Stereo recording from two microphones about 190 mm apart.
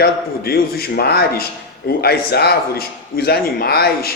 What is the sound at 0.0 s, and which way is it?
A man's voice, 55° left (ahead or behind).